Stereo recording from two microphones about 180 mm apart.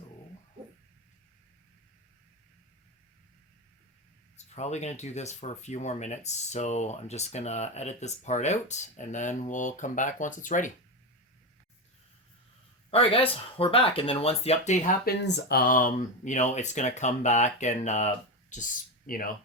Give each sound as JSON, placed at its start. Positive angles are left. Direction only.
{"t": 4.4, "sound": "speech", "side_deg": 40}
{"t": 12.9, "sound": "speech", "side_deg": 30}
{"t": 15.0, "sound": "speech", "side_deg": 65}